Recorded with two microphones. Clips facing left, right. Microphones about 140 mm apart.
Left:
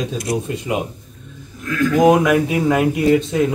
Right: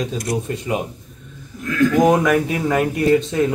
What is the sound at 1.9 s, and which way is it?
A man's voice, 15° left (ahead or behind).